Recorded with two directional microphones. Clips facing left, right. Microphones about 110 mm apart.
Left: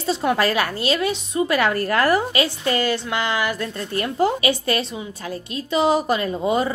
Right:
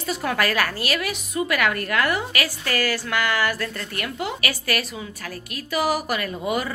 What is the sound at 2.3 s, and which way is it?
A woman's voice, 25° left (ahead or behind).